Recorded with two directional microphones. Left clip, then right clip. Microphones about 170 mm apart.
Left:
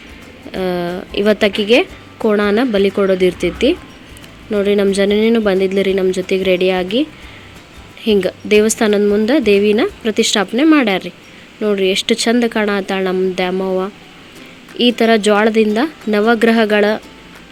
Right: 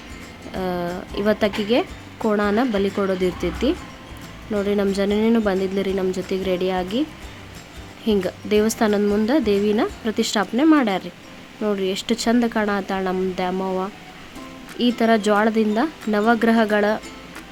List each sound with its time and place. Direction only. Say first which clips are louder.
0.5 s speech: left 6 dB; 15° left (ahead or behind)
8.0 s speech: left 7 dB; 15° left (ahead or behind)